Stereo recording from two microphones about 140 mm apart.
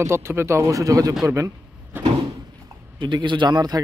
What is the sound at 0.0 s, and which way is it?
Speech, 20° right (ahead or behind).